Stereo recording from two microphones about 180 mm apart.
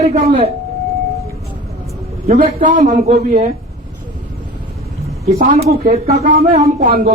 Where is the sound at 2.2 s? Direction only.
45° right (ahead or behind).